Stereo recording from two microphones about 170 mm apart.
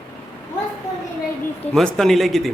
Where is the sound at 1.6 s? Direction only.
5° left (ahead or behind).